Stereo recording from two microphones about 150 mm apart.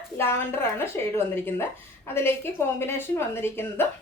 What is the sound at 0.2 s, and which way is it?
Speech, 15° left (ahead or behind).